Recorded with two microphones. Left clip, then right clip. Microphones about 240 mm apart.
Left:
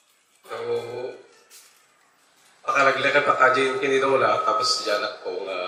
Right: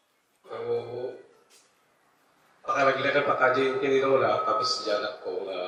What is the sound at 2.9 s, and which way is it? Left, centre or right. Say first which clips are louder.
A man's voice: left 5 dB; centre.